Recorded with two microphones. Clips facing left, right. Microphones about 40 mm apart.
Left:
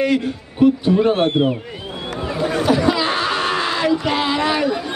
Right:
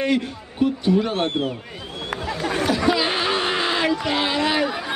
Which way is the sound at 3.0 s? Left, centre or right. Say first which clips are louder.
Left 2 dB; right.